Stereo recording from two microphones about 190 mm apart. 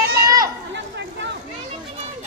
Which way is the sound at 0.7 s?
65° right (ahead or behind).